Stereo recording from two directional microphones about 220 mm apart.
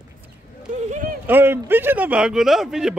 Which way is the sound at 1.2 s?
10° right (ahead or behind).